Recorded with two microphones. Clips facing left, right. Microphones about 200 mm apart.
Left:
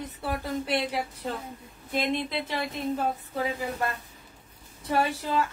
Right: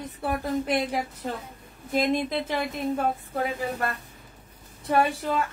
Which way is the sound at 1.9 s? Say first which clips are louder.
Right 4 dB; 45° right (ahead or behind).